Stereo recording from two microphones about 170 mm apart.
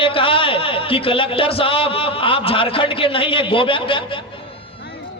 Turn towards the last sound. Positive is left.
turn(degrees=30)  # may be behind; listen again after turning